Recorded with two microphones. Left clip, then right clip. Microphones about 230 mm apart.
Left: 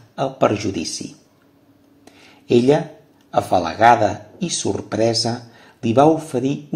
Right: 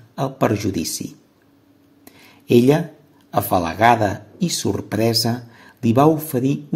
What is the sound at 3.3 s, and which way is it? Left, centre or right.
Speech, right.